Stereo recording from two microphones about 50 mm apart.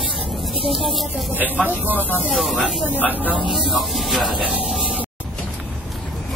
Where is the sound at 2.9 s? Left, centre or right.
Left.